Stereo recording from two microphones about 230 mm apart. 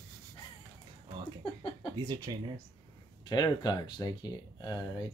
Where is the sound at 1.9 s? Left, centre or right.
Centre.